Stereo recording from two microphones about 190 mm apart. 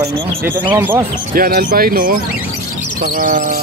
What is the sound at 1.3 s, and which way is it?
Speech, 50° right (ahead or behind).